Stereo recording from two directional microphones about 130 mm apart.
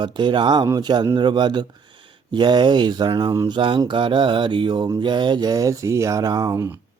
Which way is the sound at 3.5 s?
40° right (ahead or behind).